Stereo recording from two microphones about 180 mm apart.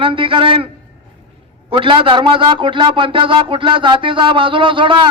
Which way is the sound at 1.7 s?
30° right (ahead or behind).